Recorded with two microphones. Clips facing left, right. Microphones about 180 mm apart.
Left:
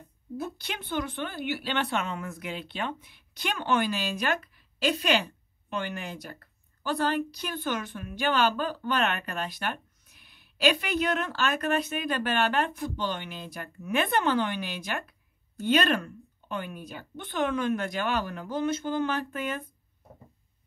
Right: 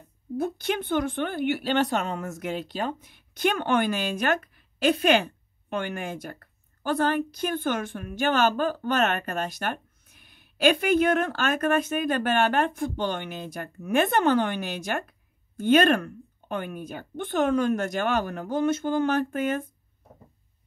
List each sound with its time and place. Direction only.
0.4 s a woman's voice: 50° right (ahead or behind)